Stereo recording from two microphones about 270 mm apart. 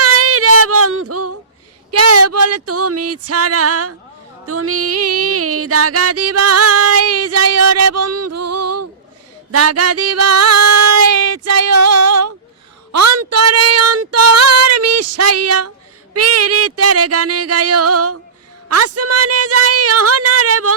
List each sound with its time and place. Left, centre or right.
0.0 s female singing: right
1.9 s a sound: right
4.4 s music: right
9.5 s female singing: right
16.1 s speech: right